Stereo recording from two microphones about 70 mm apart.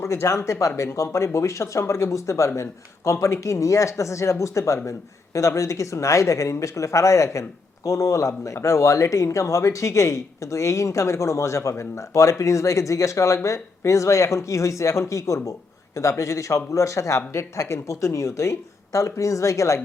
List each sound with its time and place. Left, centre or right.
0.0 s speech: left